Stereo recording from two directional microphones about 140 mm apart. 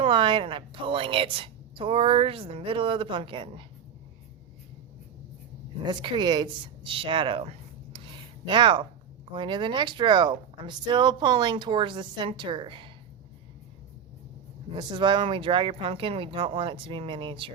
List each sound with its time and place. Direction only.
0.0 s a woman's voice: 35° right (ahead or behind)
5.8 s a woman's voice: 30° right (ahead or behind)
7.9 s a sound: 35° right (ahead or behind)
9.3 s a woman's voice: 35° right (ahead or behind)
14.8 s a woman's voice: 35° right (ahead or behind)